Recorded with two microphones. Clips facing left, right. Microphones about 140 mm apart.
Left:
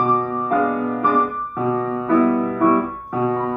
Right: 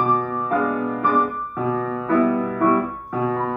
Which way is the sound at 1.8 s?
20° left (ahead or behind).